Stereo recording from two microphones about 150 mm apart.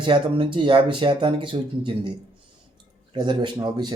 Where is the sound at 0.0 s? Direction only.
35° right (ahead or behind).